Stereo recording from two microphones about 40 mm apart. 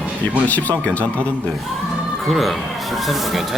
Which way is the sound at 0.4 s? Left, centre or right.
Left.